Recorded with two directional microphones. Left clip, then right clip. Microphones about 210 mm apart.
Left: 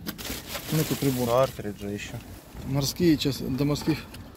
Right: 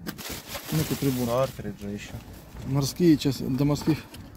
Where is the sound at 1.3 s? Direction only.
10° left (ahead or behind).